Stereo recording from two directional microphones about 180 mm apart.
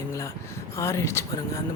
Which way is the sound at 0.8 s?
15° left (ahead or behind).